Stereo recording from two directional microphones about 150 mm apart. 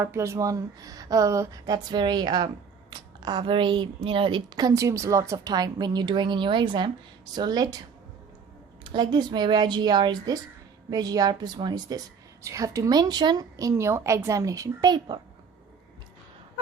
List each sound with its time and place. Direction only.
0.0 s a woman's voice: 20° right (ahead or behind)
8.8 s a woman's voice: 30° right (ahead or behind)